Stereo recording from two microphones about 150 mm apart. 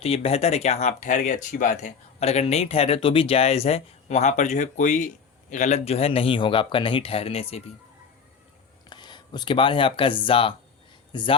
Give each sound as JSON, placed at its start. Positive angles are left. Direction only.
{"t": 0.0, "sound": "speech", "side_deg": 40}
{"t": 8.9, "sound": "speech", "side_deg": 30}